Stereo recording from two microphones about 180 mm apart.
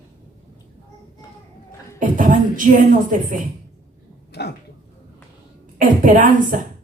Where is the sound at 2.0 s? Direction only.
50° right (ahead or behind).